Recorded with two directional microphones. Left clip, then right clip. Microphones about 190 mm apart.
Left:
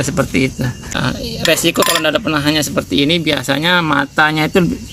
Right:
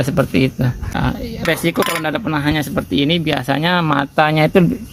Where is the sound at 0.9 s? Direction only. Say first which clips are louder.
Left 3 dB; 40° right (ahead or behind).